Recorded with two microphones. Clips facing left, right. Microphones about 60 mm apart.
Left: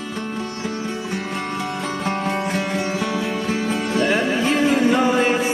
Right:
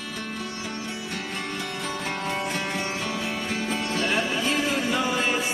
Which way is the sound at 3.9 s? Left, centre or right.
Left.